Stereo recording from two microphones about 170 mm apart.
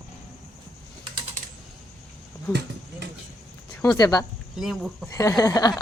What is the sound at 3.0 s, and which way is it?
Vehicle, 80° right.